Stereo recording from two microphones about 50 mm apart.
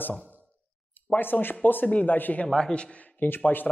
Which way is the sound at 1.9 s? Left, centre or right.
Left.